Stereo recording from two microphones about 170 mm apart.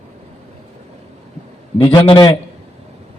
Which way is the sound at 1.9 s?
25° left (ahead or behind).